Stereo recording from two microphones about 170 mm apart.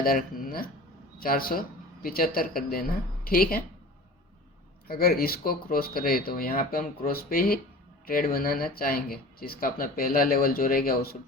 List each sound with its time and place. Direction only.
0.0 s speech: 55° left (ahead or behind)
4.9 s speech: 60° left (ahead or behind)